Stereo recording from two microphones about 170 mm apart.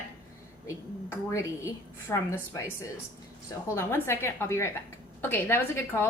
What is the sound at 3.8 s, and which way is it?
A woman's voice, 15° left (ahead or behind).